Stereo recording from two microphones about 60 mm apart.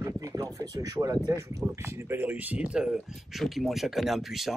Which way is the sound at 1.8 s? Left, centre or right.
Right.